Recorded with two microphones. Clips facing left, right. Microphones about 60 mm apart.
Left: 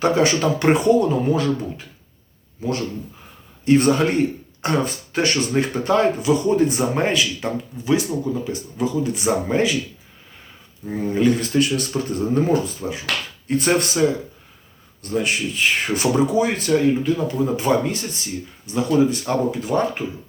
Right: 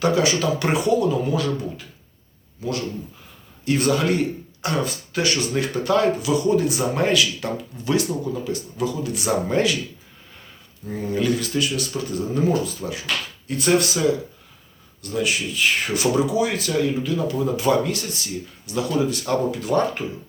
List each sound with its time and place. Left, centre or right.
0.0 s speech: left
2.6 s speech: left
10.8 s speech: left